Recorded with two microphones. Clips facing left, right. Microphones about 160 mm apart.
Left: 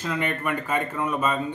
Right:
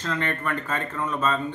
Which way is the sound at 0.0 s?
10° left (ahead or behind).